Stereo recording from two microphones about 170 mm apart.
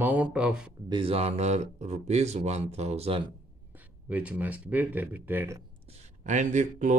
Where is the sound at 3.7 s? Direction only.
10° right (ahead or behind).